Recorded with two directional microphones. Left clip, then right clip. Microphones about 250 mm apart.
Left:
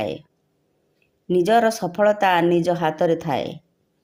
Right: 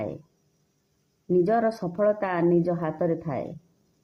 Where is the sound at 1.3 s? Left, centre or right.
Left.